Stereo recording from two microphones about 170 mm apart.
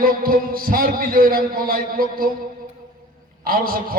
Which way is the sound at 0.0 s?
60° right (ahead or behind).